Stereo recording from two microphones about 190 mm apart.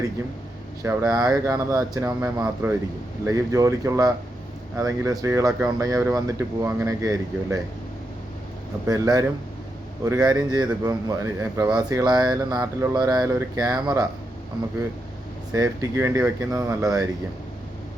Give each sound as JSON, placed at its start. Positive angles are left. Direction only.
{"t": 0.8, "sound": "speech", "side_deg": -15}
{"t": 8.9, "sound": "speech", "side_deg": -20}
{"t": 15.5, "sound": "speech", "side_deg": -15}